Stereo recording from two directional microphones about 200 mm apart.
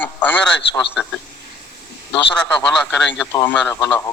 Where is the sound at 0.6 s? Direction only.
60° left (ahead or behind).